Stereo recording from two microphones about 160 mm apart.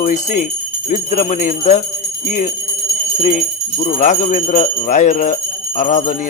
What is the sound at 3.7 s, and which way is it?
Jingle bell, 50° left (ahead or behind).